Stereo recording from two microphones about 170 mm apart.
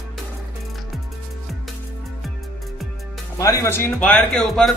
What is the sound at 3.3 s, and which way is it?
A man's voice, 20° left (ahead or behind).